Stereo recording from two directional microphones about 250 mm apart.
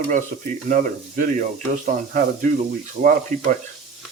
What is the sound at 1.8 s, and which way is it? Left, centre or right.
Stir, right.